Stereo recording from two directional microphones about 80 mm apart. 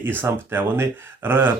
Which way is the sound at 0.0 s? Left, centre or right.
Right.